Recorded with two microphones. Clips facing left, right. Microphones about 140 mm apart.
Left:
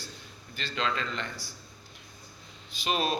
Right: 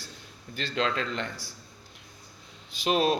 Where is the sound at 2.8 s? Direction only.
70° right (ahead or behind).